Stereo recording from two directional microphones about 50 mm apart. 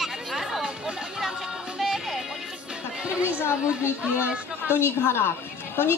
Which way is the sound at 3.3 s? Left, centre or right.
Left.